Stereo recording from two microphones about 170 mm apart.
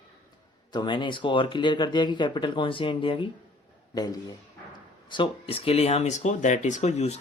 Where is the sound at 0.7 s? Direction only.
25° left (ahead or behind).